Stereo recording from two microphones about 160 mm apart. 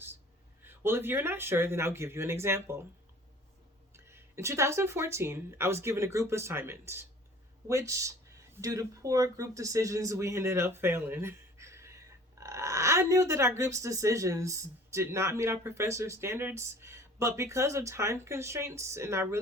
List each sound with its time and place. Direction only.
0.6 s speech: 15° right (ahead or behind)
3.9 s speech: 15° right (ahead or behind)